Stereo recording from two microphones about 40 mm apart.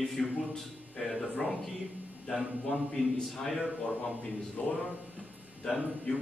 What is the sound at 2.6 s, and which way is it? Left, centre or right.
A man's voice, centre.